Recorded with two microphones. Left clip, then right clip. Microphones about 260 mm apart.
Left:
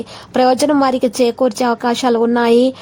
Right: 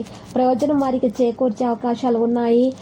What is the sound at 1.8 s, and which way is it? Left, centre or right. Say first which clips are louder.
Speech: left 4 dB; left.